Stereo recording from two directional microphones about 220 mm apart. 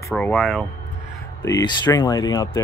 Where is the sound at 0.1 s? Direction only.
5° left (ahead or behind).